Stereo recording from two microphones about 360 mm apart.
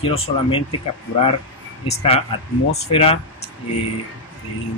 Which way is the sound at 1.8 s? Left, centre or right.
Centre.